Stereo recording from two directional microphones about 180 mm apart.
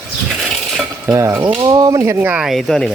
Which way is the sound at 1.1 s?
15° right (ahead or behind).